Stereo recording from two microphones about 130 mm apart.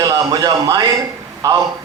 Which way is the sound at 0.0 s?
30° right (ahead or behind).